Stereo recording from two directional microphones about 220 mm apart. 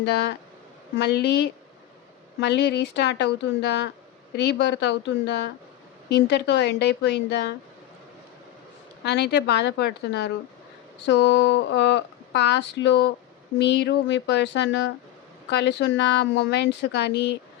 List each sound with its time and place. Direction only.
0.0 s speech: 50° left (ahead or behind)
9.0 s speech: 50° left (ahead or behind)